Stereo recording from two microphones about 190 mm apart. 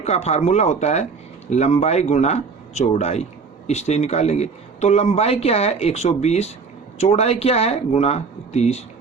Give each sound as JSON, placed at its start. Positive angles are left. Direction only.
{"t": 0.0, "sound": "a man's voice", "side_deg": 35}